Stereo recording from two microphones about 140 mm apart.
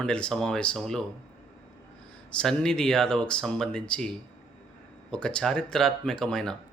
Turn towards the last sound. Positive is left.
turn(degrees=5)  # may be behind; listen again after turning